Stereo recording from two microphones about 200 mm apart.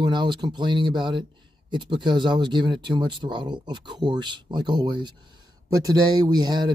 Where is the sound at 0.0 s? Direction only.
20° right (ahead or behind).